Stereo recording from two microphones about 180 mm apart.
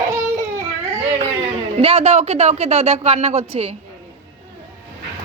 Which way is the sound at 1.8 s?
35° right (ahead or behind).